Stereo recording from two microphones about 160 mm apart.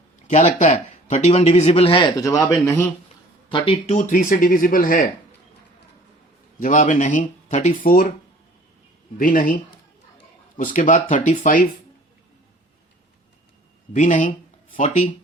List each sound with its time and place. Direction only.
0.3 s speech: 45° left (ahead or behind); by 2.9 s 15° left (ahead or behind)
3.5 s speech: 40° left (ahead or behind); by 5.0 s 60° left (ahead or behind)
6.6 s speech: 55° left (ahead or behind)
9.1 s speech: 60° left (ahead or behind)
10.6 s speech: 55° left (ahead or behind)
13.9 s speech: 55° left (ahead or behind)